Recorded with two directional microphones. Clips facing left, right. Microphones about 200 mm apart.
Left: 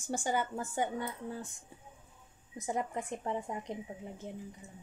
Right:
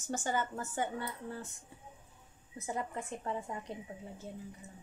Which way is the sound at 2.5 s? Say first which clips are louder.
Left 3 dB; 15° left (ahead or behind).